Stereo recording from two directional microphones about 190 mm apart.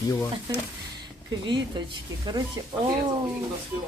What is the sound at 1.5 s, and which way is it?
Speech, 25° right (ahead or behind).